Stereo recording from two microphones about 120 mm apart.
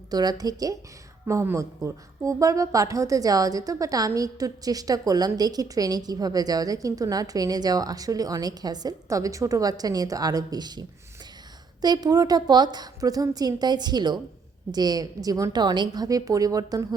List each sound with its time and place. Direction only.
0.1 s a woman's voice: 35° right (ahead or behind)